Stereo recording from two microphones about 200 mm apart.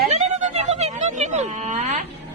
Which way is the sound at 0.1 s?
35° right (ahead or behind).